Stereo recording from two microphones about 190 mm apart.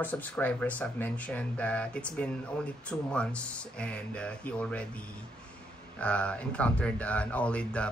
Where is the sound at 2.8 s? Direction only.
5° left (ahead or behind).